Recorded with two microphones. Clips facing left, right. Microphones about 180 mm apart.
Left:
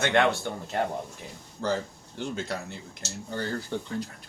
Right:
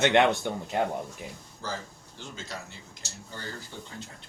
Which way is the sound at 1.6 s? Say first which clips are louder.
Left 8 dB; 60° left (ahead or behind).